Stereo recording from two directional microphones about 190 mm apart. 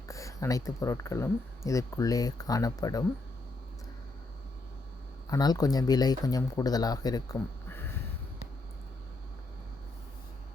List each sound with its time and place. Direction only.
0.1 s speech: 15° left (ahead or behind)
5.3 s speech: 20° left (ahead or behind)